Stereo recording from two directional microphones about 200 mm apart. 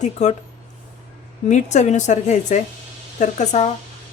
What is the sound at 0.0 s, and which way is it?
Speech, 35° left (ahead or behind).